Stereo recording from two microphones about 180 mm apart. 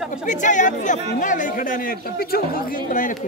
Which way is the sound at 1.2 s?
45° left (ahead or behind).